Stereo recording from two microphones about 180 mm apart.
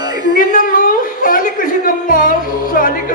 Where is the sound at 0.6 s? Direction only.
50° left (ahead or behind).